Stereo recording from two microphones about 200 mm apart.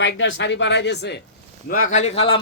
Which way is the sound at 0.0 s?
65° left (ahead or behind).